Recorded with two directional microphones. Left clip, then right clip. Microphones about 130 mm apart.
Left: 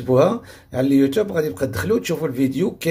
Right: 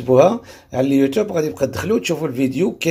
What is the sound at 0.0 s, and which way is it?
Speech, 10° right (ahead or behind).